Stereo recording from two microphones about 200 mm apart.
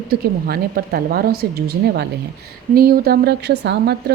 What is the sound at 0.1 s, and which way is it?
A woman's voice, 50° right (ahead or behind).